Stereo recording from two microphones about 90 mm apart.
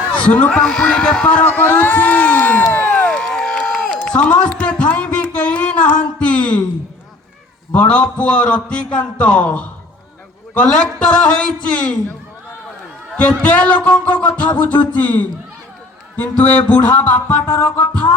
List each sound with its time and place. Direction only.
0.1 s a man's voice: 15° left (ahead or behind)
2.7 s a sound: 20° left (ahead or behind)
4.0 s a man's voice: 15° left (ahead or behind)
4.8 s a sound: 15° left (ahead or behind)
7.7 s a man's voice: 15° left (ahead or behind)
13.1 s a man's voice: 15° left (ahead or behind)